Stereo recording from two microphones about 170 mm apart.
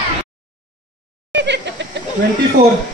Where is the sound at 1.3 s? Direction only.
90° right.